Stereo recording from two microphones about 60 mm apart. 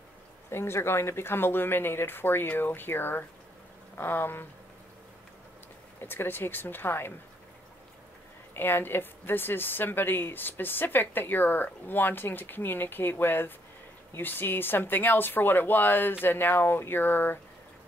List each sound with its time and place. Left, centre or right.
0.5 s a woman's voice: left
5.9 s a woman's voice: left
8.5 s a woman's voice: left